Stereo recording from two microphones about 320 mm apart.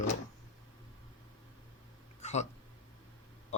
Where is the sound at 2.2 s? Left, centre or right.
Left.